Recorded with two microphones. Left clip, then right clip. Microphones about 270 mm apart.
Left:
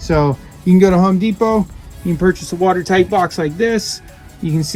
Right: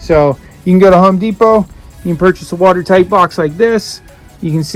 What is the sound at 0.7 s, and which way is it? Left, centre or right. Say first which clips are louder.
Speech: right 7 dB; centre.